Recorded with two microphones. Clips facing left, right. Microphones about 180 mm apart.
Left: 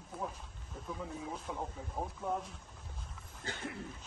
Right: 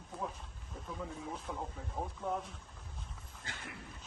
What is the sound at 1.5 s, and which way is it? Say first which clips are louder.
Speech: left 1 dB; centre (ahead or behind).